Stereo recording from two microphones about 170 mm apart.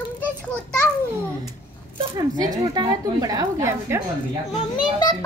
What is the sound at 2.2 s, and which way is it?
Speech, 20° right (ahead or behind).